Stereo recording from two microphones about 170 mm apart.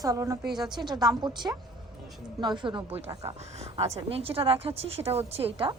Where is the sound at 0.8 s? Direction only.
25° right (ahead or behind).